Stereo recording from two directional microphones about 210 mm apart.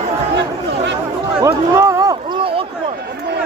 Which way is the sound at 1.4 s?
15° right (ahead or behind).